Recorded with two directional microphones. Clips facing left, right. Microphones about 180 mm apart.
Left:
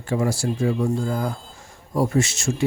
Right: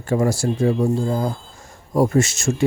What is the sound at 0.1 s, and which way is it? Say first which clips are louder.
Speech: right 3 dB; 45° right (ahead or behind).